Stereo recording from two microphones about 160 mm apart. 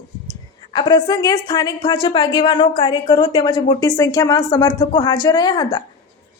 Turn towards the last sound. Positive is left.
turn(degrees=25)  # may be behind; listen again after turning